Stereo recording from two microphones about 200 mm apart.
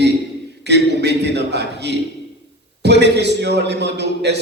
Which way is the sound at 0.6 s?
60° right (ahead or behind).